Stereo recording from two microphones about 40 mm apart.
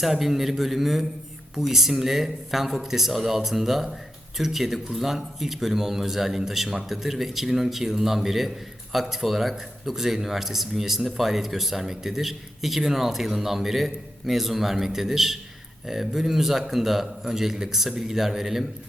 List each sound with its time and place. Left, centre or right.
0.0 s a man's voice: centre